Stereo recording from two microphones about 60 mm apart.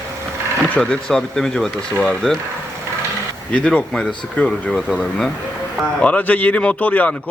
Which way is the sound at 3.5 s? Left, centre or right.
Centre.